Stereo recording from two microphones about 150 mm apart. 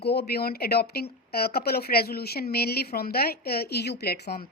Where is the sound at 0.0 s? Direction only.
90° left.